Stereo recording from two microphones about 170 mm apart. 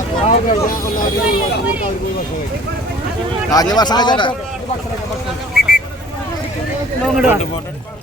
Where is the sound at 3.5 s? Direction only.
20° left (ahead or behind).